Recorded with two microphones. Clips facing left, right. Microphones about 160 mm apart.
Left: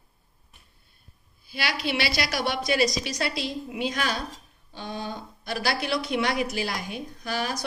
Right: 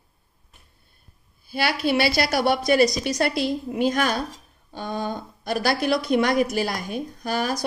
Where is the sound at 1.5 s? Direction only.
50° right (ahead or behind).